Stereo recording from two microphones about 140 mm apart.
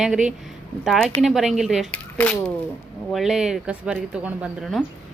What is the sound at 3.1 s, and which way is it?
Speech, centre (ahead or behind).